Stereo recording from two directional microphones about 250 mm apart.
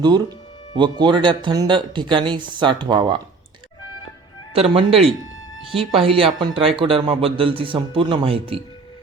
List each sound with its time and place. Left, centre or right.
0.8 s speech: centre
4.5 s speech: right